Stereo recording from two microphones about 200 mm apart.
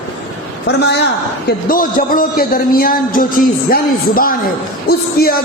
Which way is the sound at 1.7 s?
45° left (ahead or behind).